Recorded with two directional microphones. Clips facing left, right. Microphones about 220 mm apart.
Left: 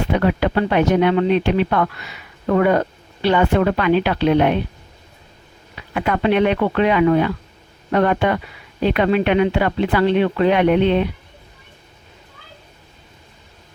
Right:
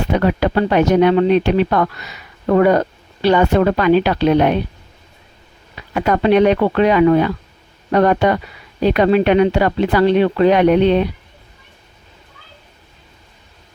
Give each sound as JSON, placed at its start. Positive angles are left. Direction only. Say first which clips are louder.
{"t": 0.1, "sound": "speech", "louder": "right 2 dB", "side_deg": -40}
{"t": 5.9, "sound": "speech", "louder": "right 4 dB", "side_deg": -40}